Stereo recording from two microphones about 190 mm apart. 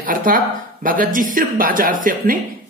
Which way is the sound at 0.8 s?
45° right (ahead or behind).